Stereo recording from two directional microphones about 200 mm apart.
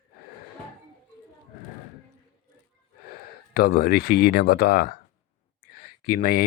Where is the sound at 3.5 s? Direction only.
50° left (ahead or behind).